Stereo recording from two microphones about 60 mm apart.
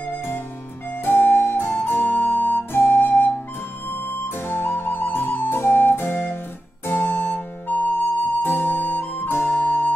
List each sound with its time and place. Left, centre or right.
1.0 s flute: left
6.9 s music: left
8.4 s flute: left